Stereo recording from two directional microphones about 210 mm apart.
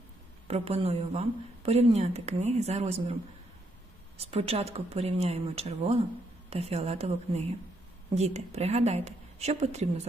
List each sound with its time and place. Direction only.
0.4 s speech: 30° right (ahead or behind)
4.2 s speech: 30° right (ahead or behind)